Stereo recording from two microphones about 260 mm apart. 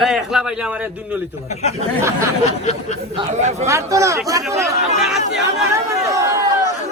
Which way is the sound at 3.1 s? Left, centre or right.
Right.